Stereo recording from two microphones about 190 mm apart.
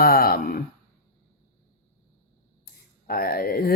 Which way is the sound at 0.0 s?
55° left (ahead or behind).